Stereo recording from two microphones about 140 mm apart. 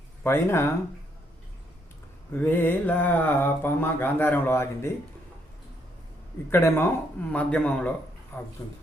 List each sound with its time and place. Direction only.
0.2 s mantra: 20° left (ahead or behind)
2.3 s mantra: 15° left (ahead or behind)
6.5 s mantra: 15° left (ahead or behind)
8.3 s speech: 15° left (ahead or behind)